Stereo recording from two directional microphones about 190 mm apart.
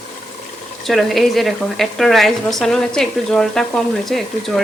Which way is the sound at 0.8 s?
Centre (ahead or behind).